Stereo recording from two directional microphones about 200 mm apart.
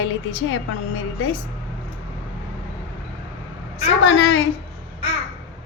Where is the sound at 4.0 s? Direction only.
65° left (ahead or behind).